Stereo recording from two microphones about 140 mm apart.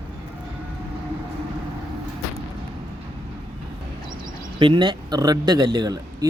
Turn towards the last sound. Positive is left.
turn(degrees=-30)  # may be behind; listen again after turning